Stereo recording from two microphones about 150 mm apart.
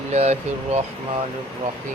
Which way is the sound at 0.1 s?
45° right (ahead or behind).